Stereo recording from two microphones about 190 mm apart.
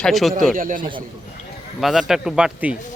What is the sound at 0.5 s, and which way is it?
Speech, 45° right (ahead or behind).